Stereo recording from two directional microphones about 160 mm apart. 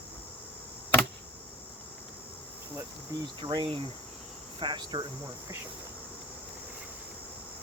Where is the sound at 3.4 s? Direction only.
30° right (ahead or behind).